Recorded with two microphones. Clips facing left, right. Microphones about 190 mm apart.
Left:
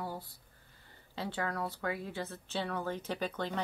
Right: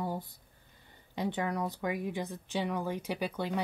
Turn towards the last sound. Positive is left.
turn(degrees=-10)  # may be behind; listen again after turning